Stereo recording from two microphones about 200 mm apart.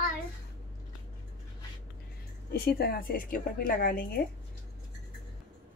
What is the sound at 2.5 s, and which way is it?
A woman's voice, 50° left (ahead or behind).